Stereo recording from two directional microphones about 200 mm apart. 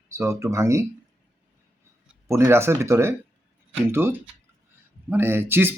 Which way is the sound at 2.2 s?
15° right (ahead or behind).